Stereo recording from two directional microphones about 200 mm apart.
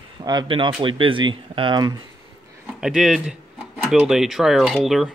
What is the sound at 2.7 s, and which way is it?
Speech, 5° right (ahead or behind).